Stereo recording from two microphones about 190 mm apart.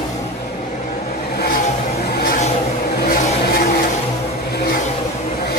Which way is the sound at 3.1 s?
50° left (ahead or behind).